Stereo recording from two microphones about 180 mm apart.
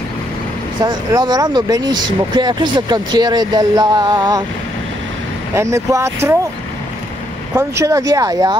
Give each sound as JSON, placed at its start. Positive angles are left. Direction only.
{"t": 0.8, "sound": "speech", "side_deg": -25}
{"t": 5.5, "sound": "speech", "side_deg": -15}
{"t": 7.5, "sound": "speech", "side_deg": -15}